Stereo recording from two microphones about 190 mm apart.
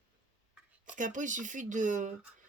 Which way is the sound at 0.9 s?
40° right (ahead or behind).